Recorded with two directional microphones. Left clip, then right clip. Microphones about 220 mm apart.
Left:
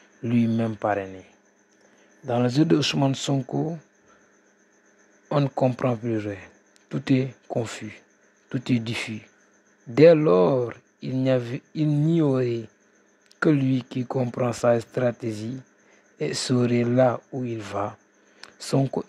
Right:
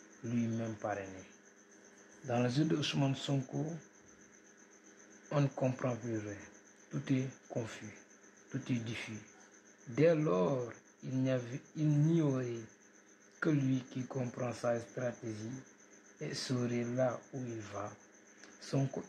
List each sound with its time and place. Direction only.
0.3 s speech: 50° left (ahead or behind)
2.2 s speech: 40° left (ahead or behind)
5.3 s speech: 35° left (ahead or behind); by 15.1 s 50° left (ahead or behind)
16.2 s speech: 45° left (ahead or behind)